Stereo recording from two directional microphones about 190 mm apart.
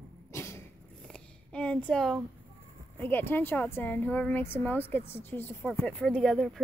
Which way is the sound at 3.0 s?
10° left (ahead or behind).